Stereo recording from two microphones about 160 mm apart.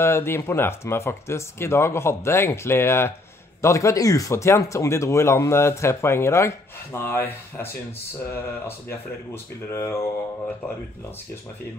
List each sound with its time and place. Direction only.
0.0 s speech: 15° left (ahead or behind)